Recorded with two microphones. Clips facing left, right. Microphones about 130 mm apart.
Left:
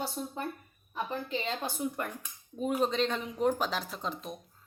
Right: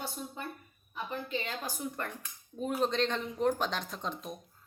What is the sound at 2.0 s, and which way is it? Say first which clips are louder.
A woman's voice: left 2 dB; 10° left (ahead or behind).